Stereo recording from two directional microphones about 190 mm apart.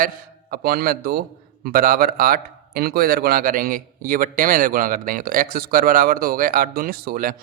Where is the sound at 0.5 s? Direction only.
50° right (ahead or behind).